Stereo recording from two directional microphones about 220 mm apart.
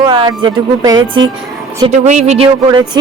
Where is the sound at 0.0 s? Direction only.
20° right (ahead or behind).